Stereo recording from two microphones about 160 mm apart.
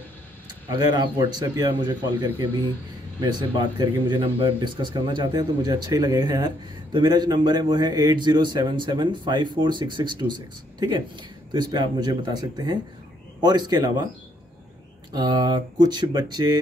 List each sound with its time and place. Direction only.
0.7 s speech: 30° right (ahead or behind)
3.2 s speech: 25° right (ahead or behind)
15.1 s speech: 25° right (ahead or behind)